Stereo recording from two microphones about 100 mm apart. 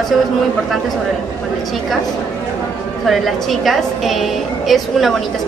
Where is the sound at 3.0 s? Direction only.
Centre (ahead or behind).